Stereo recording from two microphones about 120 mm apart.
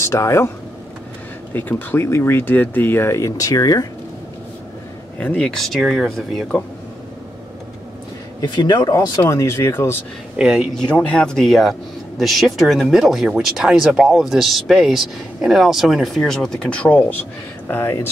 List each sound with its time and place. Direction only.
0.0 s speech: 25° left (ahead or behind)
1.5 s speech: 15° left (ahead or behind); by 3.8 s 30° left (ahead or behind)
5.2 s speech: 10° left (ahead or behind)
8.4 s speech: 35° left (ahead or behind)
9.2 s speech: 20° left (ahead or behind)
10.3 s speech: 5° right (ahead or behind)
10.7 s speech: 5° left (ahead or behind)